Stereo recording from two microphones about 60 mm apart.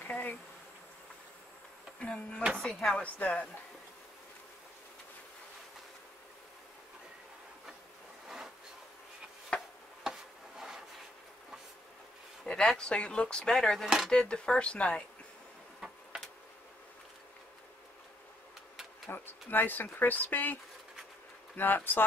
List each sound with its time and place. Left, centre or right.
0.0 s bee: left
2.0 s speech: centre
3.0 s speech: left
9.5 s a sound: centre
12.4 s speech: centre
13.8 s speech: centre
14.1 s speech: centre
19.0 s speech: left
21.5 s speech: left